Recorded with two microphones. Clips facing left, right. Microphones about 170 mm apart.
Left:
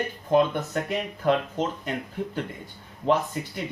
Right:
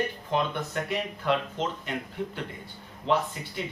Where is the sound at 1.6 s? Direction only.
40° left (ahead or behind).